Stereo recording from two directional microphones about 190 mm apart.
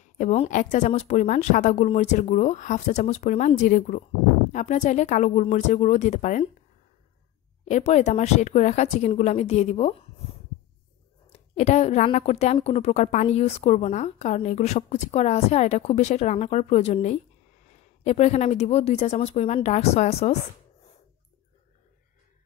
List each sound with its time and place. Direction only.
0.2 s a woman's voice: 35° left (ahead or behind)
7.6 s a woman's voice: 40° left (ahead or behind)
11.2 s a woman's voice: 35° left (ahead or behind)